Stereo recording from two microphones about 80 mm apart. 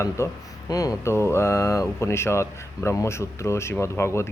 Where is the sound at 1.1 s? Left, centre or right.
Left.